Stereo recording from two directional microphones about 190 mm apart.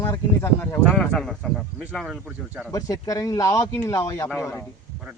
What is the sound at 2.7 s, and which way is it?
Speech, 15° left (ahead or behind).